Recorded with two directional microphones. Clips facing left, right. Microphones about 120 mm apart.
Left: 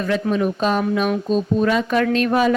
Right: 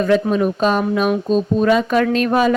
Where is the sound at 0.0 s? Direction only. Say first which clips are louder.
Right 4 dB; 35° right (ahead or behind).